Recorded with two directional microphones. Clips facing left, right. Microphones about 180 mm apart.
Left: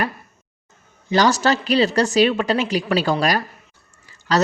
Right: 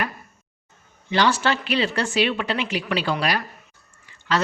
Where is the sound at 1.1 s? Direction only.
40° left (ahead or behind).